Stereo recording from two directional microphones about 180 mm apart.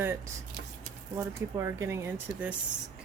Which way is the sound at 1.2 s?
15° right (ahead or behind).